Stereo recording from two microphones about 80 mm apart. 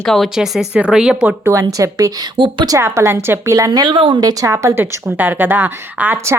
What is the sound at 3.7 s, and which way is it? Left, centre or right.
Speech, right.